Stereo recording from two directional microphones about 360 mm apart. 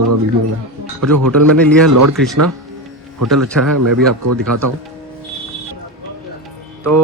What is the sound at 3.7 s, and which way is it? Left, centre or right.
Speech, right.